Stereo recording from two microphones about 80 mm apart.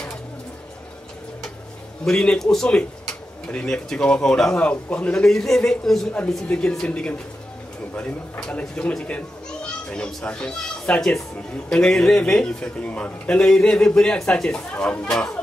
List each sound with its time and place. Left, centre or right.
2.0 s a child's voice: centre